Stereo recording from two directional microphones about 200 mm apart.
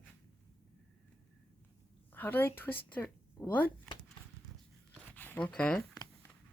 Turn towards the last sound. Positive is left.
turn(degrees=5)  # may be behind; listen again after turning